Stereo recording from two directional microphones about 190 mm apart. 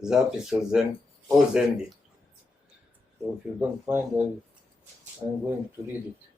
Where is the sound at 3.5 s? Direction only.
10° right (ahead or behind).